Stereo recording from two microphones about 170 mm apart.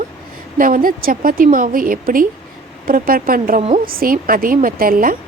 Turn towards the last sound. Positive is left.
turn(degrees=-55)  # may be behind; listen again after turning